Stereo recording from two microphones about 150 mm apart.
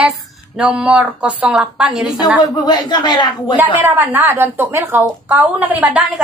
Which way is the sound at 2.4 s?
25° left (ahead or behind).